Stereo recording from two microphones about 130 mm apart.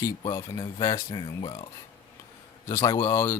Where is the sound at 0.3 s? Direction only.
25° left (ahead or behind).